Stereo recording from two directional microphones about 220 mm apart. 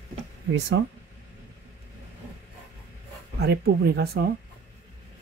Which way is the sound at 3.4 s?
45° right (ahead or behind).